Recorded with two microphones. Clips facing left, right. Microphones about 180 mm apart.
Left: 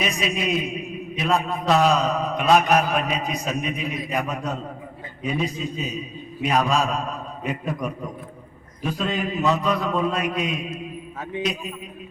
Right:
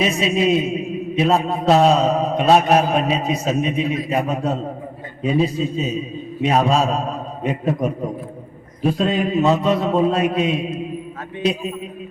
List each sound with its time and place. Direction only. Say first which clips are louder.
0.0 s a man's voice: right 7 dB; 30° right (ahead or behind)